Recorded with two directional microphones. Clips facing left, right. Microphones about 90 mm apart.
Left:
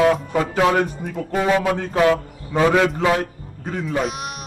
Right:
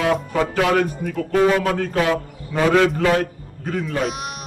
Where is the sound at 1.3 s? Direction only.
10° left (ahead or behind).